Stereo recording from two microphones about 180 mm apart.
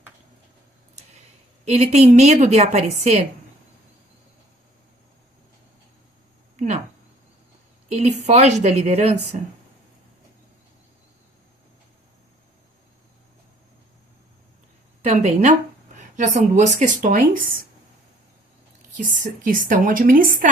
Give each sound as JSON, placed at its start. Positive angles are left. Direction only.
{"t": 1.6, "sound": "a woman's voice", "side_deg": -35}
{"t": 7.9, "sound": "a woman's voice", "side_deg": -35}
{"t": 15.0, "sound": "a woman's voice", "side_deg": -40}
{"t": 18.9, "sound": "a woman's voice", "side_deg": -45}